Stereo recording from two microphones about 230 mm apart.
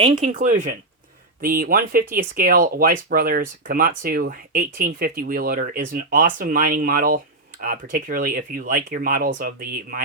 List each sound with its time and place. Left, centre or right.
0.0 s speech: right